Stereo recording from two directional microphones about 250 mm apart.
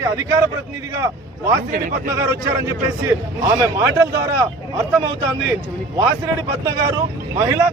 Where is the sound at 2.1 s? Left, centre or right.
Centre.